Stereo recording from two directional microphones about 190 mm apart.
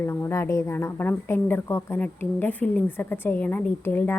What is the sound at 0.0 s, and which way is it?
A woman's voice, 15° left (ahead or behind).